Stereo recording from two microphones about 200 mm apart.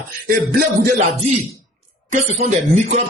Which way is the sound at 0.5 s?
35° right (ahead or behind).